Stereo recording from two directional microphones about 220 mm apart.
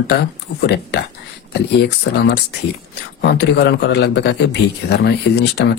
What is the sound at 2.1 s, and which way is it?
Speech, 55° left (ahead or behind).